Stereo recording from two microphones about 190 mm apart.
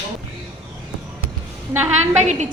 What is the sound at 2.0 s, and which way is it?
Speech, 35° right (ahead or behind).